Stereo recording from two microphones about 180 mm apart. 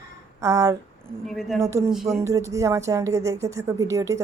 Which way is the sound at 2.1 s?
15° right (ahead or behind).